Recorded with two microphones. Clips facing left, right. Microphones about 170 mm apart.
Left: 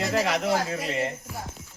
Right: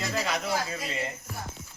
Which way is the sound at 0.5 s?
60° left (ahead or behind).